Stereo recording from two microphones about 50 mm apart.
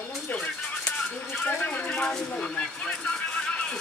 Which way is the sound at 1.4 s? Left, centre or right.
Left.